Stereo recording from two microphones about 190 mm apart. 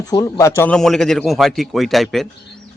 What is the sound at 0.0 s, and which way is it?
Speech, 20° left (ahead or behind).